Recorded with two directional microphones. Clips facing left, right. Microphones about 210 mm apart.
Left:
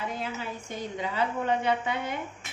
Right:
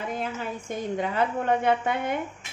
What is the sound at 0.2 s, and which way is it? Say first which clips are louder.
A woman's voice: right 3 dB; 50° right (ahead or behind).